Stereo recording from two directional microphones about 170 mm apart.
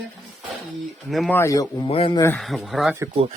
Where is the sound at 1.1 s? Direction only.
Centre (ahead or behind).